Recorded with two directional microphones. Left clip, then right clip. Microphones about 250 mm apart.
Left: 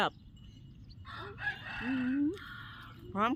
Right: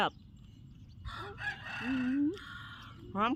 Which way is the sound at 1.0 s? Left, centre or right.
Right.